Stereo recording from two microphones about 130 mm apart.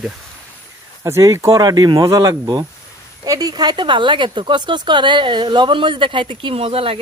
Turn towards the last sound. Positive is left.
turn(degrees=-45)  # may be behind; listen again after turning